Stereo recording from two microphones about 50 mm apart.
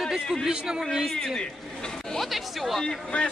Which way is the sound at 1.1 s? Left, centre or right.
Centre.